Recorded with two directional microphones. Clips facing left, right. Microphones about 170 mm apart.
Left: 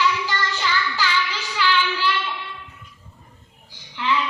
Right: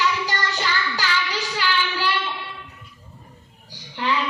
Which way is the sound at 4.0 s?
40° right (ahead or behind).